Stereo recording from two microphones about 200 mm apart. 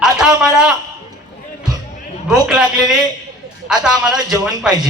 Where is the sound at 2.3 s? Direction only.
5° right (ahead or behind).